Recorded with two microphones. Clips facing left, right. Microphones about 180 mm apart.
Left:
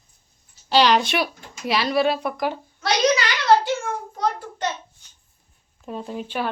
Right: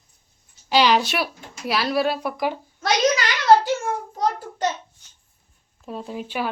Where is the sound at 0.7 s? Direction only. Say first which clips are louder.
Left 1 dB; 5° right (ahead or behind).